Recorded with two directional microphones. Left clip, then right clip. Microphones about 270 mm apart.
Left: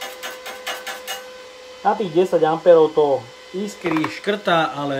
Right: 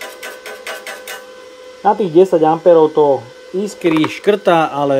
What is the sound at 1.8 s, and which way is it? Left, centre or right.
Speech, right.